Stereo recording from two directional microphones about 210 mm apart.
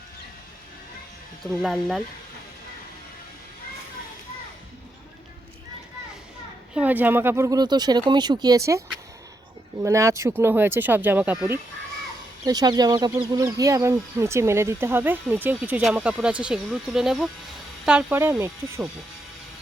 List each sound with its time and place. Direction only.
1.6 s speech: centre (ahead or behind)
6.7 s speech: 10° right (ahead or behind)
9.8 s speech: 15° right (ahead or behind)